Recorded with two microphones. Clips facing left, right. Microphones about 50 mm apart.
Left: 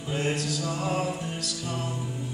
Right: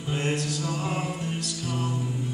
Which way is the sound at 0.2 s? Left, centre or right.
Right.